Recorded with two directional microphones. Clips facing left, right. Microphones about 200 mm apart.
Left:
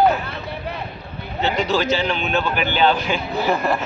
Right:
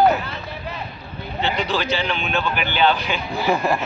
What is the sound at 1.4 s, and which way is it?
A man's voice, 45° left (ahead or behind).